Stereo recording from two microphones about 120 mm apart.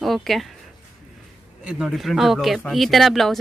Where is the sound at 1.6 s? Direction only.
5° right (ahead or behind).